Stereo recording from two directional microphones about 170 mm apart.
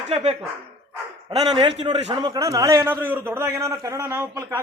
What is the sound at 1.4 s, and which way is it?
Speech, 25° right (ahead or behind).